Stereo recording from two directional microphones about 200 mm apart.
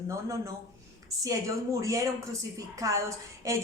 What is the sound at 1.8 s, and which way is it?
Speech, 15° right (ahead or behind).